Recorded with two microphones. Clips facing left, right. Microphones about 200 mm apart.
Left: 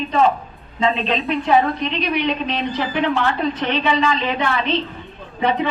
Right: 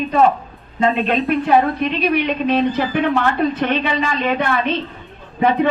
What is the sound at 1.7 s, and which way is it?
A woman's voice, 55° right (ahead or behind).